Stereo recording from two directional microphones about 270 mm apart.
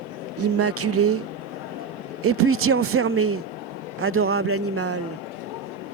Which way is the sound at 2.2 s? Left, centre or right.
Right.